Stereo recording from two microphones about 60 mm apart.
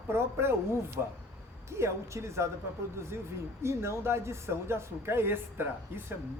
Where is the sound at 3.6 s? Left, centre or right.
Right.